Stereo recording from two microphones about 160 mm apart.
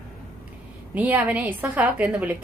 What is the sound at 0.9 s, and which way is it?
A woman's voice, 10° right (ahead or behind).